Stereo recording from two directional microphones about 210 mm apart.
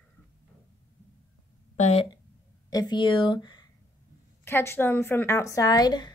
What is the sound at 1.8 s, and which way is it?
Speech, 30° left (ahead or behind).